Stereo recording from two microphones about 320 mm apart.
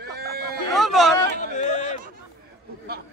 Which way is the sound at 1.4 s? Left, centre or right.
Left.